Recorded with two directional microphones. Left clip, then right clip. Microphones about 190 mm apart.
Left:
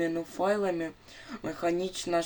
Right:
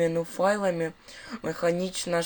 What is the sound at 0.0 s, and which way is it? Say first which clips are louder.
Speech: right 5 dB; 20° right (ahead or behind).